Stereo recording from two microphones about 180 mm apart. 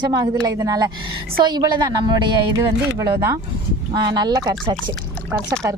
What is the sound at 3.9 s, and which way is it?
Speech, 25° right (ahead or behind).